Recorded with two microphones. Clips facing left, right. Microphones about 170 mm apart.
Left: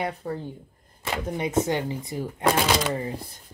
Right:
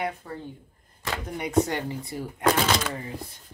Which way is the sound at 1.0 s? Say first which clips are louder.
Left 4 dB; 20° left (ahead or behind).